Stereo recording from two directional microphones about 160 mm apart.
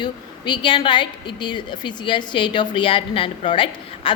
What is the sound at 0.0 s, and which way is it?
A woman's voice, 30° left (ahead or behind).